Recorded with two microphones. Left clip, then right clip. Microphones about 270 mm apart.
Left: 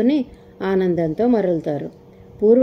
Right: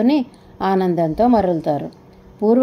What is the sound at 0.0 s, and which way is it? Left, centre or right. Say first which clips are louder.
A woman's voice: right 1 dB; centre.